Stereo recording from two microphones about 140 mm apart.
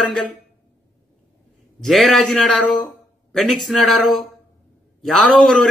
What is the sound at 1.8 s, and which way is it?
Speech, centre (ahead or behind).